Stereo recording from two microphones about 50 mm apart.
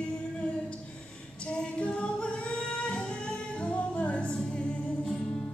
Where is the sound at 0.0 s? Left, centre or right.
Left.